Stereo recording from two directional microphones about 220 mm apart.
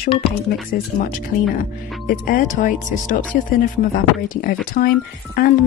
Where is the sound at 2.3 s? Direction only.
40° left (ahead or behind).